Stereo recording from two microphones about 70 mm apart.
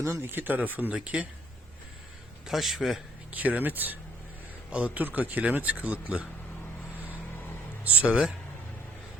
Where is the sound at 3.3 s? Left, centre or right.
Right.